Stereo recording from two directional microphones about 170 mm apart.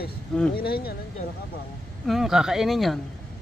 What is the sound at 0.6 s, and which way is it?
Speech, 65° left (ahead or behind).